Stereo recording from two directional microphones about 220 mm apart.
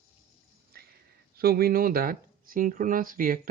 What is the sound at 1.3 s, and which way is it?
Speech, 45° right (ahead or behind).